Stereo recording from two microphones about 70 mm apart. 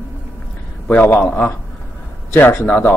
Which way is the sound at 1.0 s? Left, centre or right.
Left.